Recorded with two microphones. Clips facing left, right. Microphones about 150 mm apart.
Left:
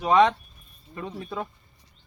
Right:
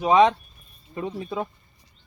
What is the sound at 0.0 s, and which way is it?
Speech, 10° right (ahead or behind).